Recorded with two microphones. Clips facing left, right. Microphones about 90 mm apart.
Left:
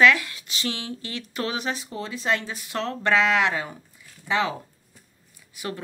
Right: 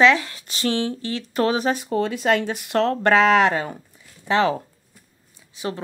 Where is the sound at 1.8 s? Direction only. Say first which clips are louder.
Right 9 dB; 60° right (ahead or behind).